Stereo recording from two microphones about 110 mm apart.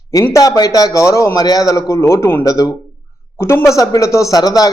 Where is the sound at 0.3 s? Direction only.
35° left (ahead or behind).